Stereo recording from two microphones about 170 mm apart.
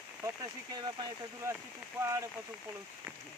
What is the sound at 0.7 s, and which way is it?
Speech, 25° right (ahead or behind).